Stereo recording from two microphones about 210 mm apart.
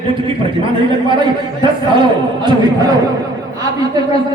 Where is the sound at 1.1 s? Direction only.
20° right (ahead or behind).